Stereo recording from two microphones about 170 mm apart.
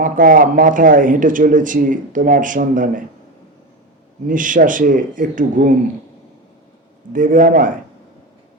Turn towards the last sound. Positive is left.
turn(degrees=-50)  # may be behind; listen again after turning